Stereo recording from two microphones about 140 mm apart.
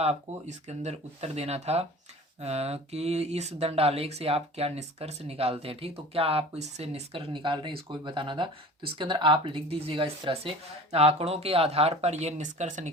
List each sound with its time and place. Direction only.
0.0 s speech: 50° right (ahead or behind)